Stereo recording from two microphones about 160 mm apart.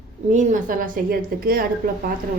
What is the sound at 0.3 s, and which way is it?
A woman's voice, 50° right (ahead or behind).